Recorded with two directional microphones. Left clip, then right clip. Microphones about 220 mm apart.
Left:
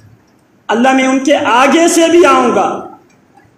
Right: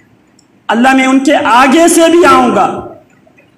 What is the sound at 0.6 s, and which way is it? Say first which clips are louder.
A woman's voice: right 2 dB; 20° right (ahead or behind).